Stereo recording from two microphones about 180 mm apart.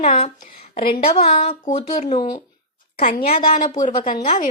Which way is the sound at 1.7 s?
40° left (ahead or behind).